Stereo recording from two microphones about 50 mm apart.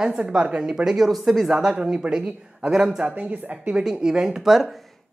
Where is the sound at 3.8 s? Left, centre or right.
Centre.